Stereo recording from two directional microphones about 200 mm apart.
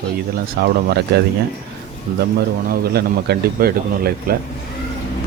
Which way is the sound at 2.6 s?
50° right (ahead or behind).